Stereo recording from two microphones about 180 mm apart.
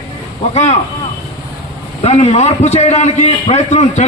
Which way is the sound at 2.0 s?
35° left (ahead or behind).